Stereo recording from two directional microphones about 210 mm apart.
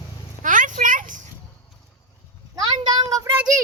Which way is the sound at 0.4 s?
40° right (ahead or behind).